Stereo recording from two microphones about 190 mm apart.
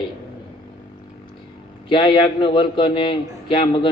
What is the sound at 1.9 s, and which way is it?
A man's voice, 25° left (ahead or behind).